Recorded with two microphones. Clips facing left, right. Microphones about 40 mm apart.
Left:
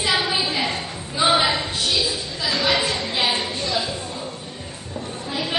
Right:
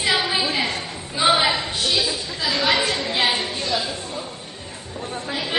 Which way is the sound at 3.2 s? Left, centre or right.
Centre.